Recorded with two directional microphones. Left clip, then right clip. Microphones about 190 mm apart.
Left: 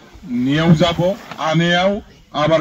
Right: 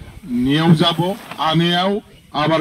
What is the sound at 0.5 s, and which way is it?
A man's voice, 25° left (ahead or behind).